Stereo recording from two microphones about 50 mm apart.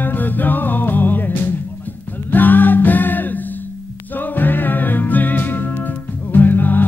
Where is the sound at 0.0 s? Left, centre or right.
Left.